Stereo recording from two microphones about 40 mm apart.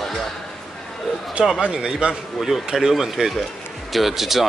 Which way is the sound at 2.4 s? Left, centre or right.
Centre.